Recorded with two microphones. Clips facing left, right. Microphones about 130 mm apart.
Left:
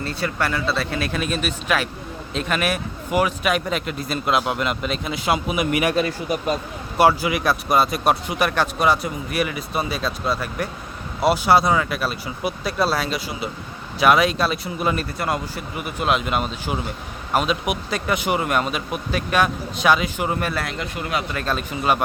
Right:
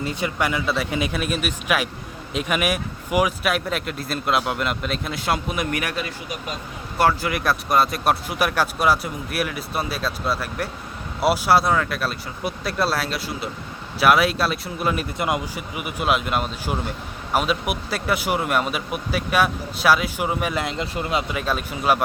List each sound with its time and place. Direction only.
0.0 s speech: 15° right (ahead or behind); by 5.8 s 5° left (ahead or behind)
5.9 s speech: 35° left (ahead or behind)
7.0 s speech: 10° left (ahead or behind)
15.2 s speech: 15° right (ahead or behind)
20.5 s speech: 20° right (ahead or behind)
21.3 s speech: 10° right (ahead or behind)